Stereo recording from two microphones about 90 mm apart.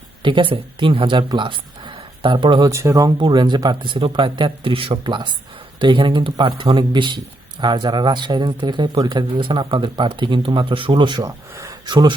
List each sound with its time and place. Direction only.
0.2 s speech: 60° right (ahead or behind)
2.6 s speech: 40° right (ahead or behind)
3.2 s speech: 55° right (ahead or behind)
11.2 s speech: 35° right (ahead or behind)
11.9 s speech: 55° right (ahead or behind)